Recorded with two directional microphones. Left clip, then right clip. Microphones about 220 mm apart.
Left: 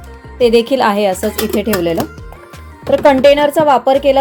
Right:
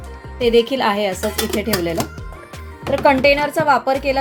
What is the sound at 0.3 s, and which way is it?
Speech, 35° left (ahead or behind).